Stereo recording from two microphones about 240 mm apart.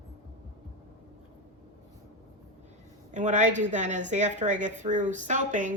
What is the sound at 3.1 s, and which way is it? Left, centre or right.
A woman's voice, right.